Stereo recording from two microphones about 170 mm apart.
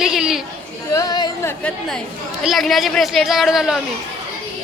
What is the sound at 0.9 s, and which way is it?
Speech, 25° left (ahead or behind).